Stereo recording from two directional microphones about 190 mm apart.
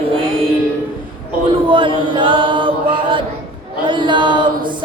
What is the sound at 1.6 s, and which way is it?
Chant, 25° right (ahead or behind).